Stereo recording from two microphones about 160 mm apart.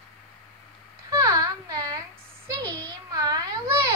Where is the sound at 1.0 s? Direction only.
20° right (ahead or behind).